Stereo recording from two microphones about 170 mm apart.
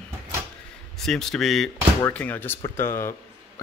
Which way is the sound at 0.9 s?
5° left (ahead or behind).